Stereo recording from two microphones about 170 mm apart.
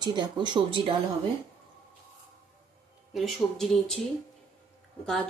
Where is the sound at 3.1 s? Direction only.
Centre (ahead or behind).